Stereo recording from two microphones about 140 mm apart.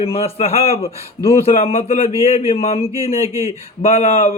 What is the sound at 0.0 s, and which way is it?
Speech, 45° left (ahead or behind).